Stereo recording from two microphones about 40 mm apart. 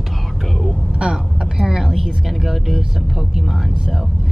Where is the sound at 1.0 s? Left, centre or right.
Centre.